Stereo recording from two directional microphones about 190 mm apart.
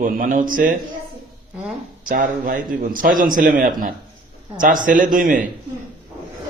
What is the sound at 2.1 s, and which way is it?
A man's voice, 50° right (ahead or behind).